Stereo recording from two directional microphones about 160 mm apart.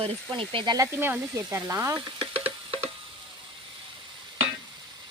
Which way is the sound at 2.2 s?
35° right (ahead or behind).